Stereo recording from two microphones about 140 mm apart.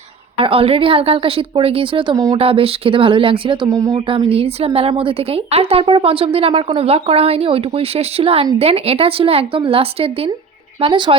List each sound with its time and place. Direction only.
0.3 s speech: 40° right (ahead or behind)
2.1 s speech: 25° right (ahead or behind)
2.4 s speech: 45° right (ahead or behind)
3.7 s speech: 25° right (ahead or behind)
4.3 s a woman's voice: 45° right (ahead or behind)